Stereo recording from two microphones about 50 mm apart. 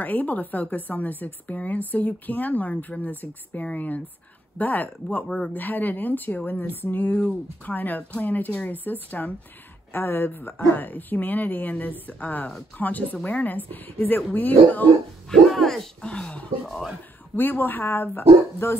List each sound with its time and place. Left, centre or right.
0.0 s a woman's voice: left
15.2 s dog: centre
16.1 s speech: left
16.6 s speech: centre
17.4 s speech: left